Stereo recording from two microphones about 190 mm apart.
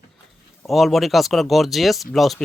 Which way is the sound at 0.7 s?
Centre (ahead or behind).